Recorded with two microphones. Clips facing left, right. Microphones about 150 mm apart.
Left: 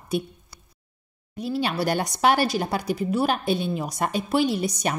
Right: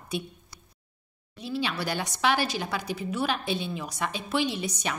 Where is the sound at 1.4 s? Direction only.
45° left (ahead or behind).